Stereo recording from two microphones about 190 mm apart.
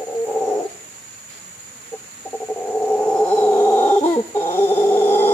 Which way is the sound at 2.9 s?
10° left (ahead or behind).